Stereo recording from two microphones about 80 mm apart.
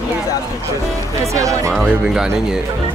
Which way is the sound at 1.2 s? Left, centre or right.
Right.